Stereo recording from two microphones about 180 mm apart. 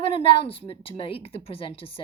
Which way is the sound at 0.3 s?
30° left (ahead or behind).